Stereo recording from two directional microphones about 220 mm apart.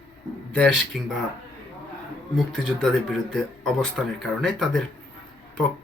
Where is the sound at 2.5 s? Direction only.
5° left (ahead or behind).